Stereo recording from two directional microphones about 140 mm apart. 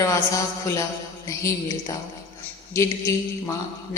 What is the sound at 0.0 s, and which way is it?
A man's voice, 25° left (ahead or behind).